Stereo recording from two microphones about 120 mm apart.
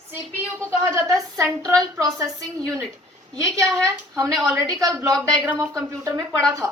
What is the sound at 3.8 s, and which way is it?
A woman's voice, 25° right (ahead or behind).